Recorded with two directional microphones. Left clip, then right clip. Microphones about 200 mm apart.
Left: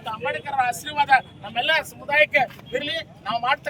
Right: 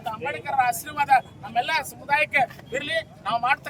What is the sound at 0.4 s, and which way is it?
Speech, 50° right (ahead or behind).